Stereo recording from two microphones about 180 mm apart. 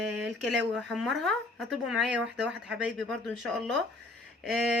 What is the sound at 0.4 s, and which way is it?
Speech, centre (ahead or behind).